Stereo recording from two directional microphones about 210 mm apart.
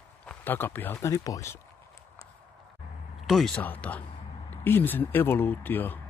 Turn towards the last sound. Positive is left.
turn(degrees=10)  # may be behind; listen again after turning